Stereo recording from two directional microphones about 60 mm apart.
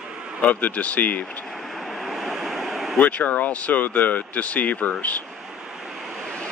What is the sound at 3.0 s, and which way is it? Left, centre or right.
Speech, left.